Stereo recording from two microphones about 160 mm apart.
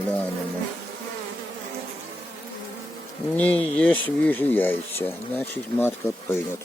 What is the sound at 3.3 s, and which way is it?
Speech, 10° left (ahead or behind).